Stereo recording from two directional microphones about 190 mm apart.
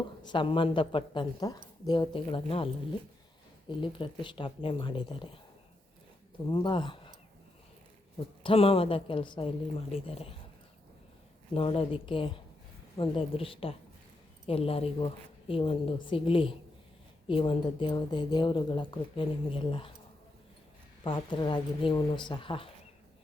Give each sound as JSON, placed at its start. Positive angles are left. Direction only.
{"t": 0.2, "sound": "speech", "side_deg": 25}
{"t": 3.7, "sound": "speech", "side_deg": 25}
{"t": 6.5, "sound": "speech", "side_deg": 25}
{"t": 8.4, "sound": "speech", "side_deg": 30}
{"t": 11.5, "sound": "speech", "side_deg": 30}
{"t": 21.0, "sound": "speech", "side_deg": 25}